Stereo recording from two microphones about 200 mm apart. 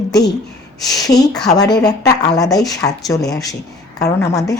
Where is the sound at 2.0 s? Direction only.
20° left (ahead or behind).